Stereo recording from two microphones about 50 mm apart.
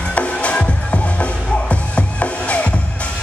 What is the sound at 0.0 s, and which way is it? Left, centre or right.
Music, left.